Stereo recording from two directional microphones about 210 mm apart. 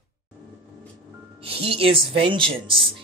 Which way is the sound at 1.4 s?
25° right (ahead or behind).